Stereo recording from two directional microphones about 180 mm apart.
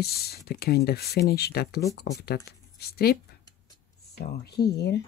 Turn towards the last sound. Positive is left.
turn(degrees=65)  # may be behind; listen again after turning